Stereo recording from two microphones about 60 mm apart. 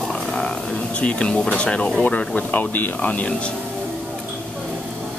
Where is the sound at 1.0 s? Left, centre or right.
Centre.